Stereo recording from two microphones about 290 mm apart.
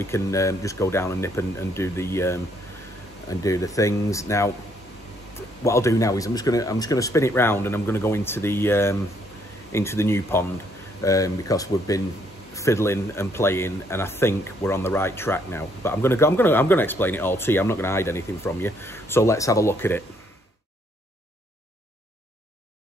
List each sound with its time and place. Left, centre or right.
0.0 s speech: centre
5.6 s speech: centre